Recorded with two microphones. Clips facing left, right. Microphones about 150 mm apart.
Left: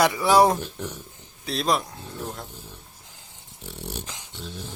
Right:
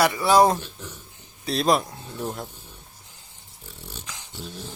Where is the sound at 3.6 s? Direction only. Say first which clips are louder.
Left 7 dB; 70° left (ahead or behind).